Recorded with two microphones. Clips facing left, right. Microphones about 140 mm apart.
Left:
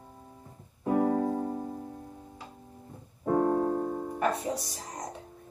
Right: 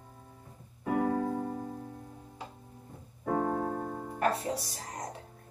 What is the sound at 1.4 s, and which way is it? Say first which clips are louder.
Music: left 3 dB; 25° left (ahead or behind).